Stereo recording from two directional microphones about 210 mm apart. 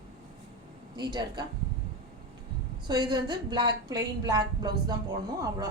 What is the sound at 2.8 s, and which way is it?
A woman's voice, 20° right (ahead or behind).